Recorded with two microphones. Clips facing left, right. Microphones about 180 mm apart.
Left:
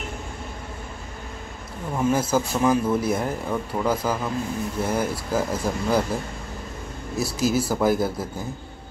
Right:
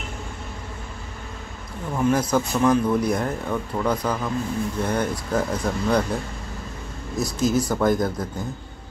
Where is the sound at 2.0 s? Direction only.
5° left (ahead or behind).